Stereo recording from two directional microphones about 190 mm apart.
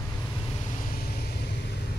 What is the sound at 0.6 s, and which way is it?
Vehicle, 40° left (ahead or behind).